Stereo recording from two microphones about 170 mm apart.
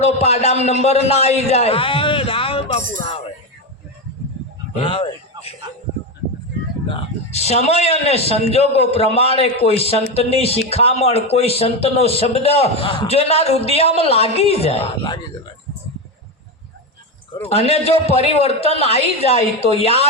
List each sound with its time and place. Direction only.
0.0 s a man's voice: 40° left (ahead or behind)
4.7 s a sound: 30° left (ahead or behind)
6.8 s a man's voice: 35° left (ahead or behind)
17.5 s a man's voice: 35° left (ahead or behind)